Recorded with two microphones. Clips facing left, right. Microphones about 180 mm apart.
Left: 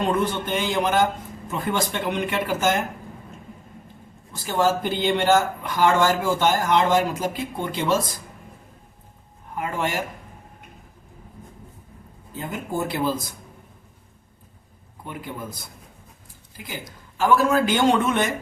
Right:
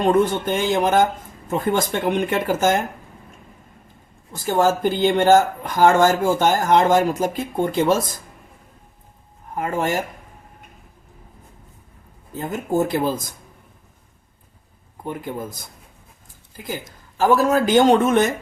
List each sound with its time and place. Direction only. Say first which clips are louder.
0.1 s speech: right 5 dB; 50° right (ahead or behind)
4.3 s speech: right 3 dB; 45° right (ahead or behind)
9.6 s speech: right 4 dB; 45° right (ahead or behind)
12.4 s speech: right 6 dB; 45° right (ahead or behind)
15.0 s speech: right 5 dB; 45° right (ahead or behind)
17.2 s a man's voice: right 2 dB; 40° right (ahead or behind)